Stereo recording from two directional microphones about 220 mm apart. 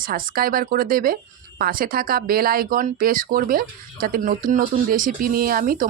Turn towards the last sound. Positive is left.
turn(degrees=-40)  # may be behind; listen again after turning